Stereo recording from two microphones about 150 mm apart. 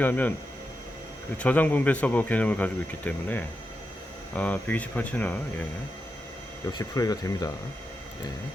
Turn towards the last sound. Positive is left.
turn(degrees=25)  # may be behind; listen again after turning